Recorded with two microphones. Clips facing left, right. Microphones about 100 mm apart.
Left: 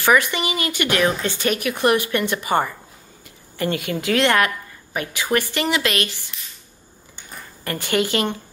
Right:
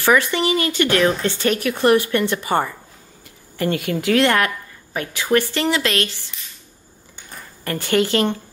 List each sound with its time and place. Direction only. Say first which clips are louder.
0.0 s a woman's voice: right 1 dB; 15° left (ahead or behind)
7.2 s a sound: even; centre (ahead or behind)
7.6 s speech: right 3 dB; 15° left (ahead or behind)